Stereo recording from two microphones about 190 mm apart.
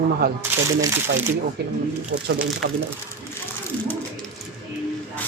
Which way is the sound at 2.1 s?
50° right (ahead or behind).